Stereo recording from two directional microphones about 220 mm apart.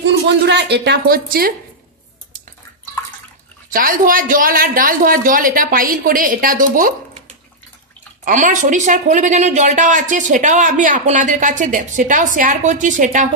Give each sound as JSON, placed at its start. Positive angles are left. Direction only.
{"t": 0.0, "sound": "a woman's voice", "side_deg": -50}
{"t": 3.7, "sound": "speech", "side_deg": -40}